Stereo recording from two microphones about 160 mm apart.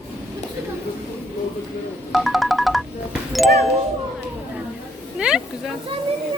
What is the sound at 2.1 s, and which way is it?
Music, centre (ahead or behind).